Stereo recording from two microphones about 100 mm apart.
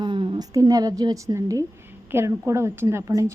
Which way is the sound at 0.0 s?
55° right (ahead or behind).